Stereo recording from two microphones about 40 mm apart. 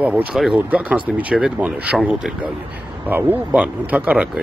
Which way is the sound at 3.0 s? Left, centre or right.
Right.